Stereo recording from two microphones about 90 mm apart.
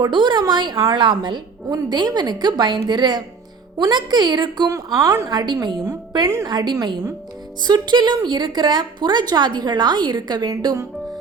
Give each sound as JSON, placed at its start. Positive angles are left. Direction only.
{"t": 0.0, "sound": "a woman's voice", "side_deg": -60}
{"t": 4.7, "sound": "a woman's voice", "side_deg": -40}